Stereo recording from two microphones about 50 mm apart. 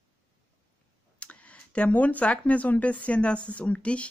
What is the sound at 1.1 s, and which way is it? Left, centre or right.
Speech, left.